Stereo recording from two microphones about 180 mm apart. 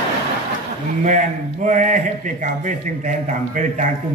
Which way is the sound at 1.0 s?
45° right (ahead or behind).